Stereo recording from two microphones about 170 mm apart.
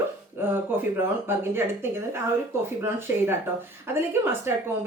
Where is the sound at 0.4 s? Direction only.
10° right (ahead or behind).